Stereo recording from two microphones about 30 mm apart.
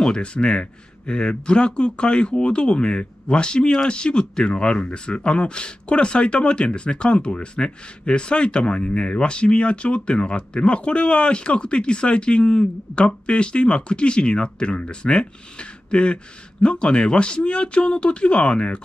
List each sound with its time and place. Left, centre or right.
0.2 s speech: left